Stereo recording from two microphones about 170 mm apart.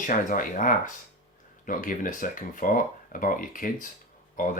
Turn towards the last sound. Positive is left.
turn(degrees=50)  # may be behind; listen again after turning